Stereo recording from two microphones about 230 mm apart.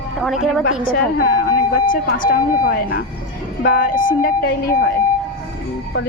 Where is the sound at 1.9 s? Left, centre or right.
Left.